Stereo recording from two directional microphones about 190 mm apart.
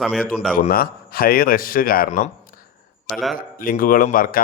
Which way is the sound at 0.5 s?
50° left (ahead or behind).